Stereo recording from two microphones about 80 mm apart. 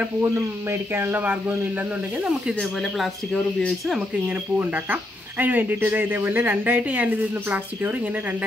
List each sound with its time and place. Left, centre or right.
0.2 s a woman's voice: right
5.4 s a woman's voice: right